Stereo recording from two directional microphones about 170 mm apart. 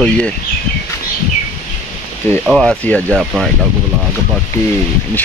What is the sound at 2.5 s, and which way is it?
Speech, 5° left (ahead or behind).